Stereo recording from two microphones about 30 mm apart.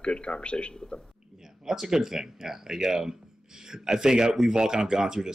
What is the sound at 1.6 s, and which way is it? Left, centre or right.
Speech, centre.